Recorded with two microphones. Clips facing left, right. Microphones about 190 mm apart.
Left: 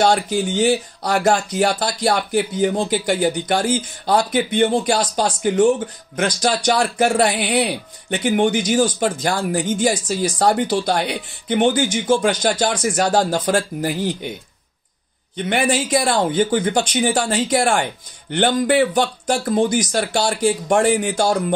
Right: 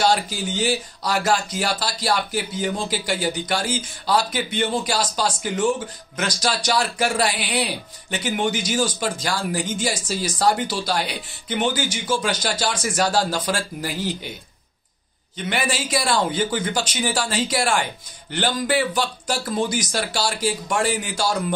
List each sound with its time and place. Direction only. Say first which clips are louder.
0.0 s speech: left 4 dB; 55° left (ahead or behind)
15.3 s speech: left 6 dB; 50° left (ahead or behind)